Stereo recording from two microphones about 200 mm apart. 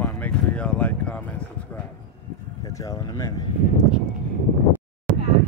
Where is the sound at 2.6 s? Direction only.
15° left (ahead or behind).